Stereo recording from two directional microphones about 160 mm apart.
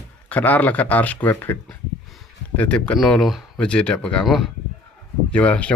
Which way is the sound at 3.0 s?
Centre (ahead or behind).